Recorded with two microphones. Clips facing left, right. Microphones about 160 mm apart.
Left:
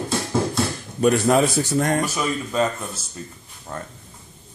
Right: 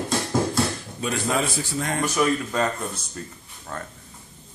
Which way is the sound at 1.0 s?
50° left (ahead or behind).